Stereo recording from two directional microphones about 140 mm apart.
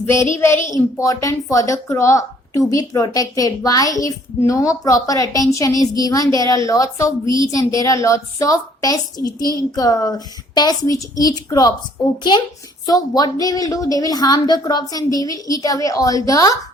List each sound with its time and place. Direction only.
0.3 s a woman's voice: 20° left (ahead or behind)
12.8 s a woman's voice: 25° left (ahead or behind)